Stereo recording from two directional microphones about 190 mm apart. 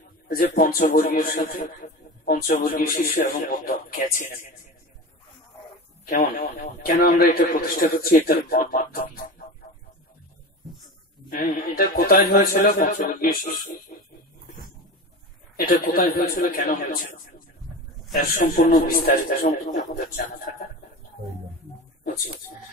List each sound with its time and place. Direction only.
0.3 s speech: 50° left (ahead or behind)
6.0 s speech: 50° left (ahead or behind)
11.2 s speech: 50° left (ahead or behind)
15.5 s speech: 50° left (ahead or behind)
18.1 s a man's voice: 50° left (ahead or behind)